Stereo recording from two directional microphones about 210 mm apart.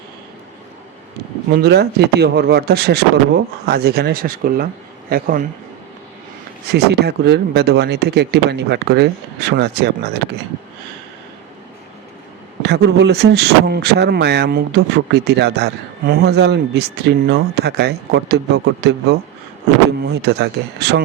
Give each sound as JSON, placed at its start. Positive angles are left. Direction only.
{"t": 1.5, "sound": "a man's voice", "side_deg": -50}
{"t": 6.7, "sound": "a man's voice", "side_deg": -50}
{"t": 12.6, "sound": "a man's voice", "side_deg": -50}